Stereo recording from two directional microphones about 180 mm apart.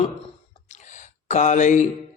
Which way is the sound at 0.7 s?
40° left (ahead or behind).